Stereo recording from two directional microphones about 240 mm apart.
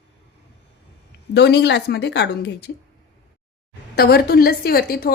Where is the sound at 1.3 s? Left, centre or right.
Left.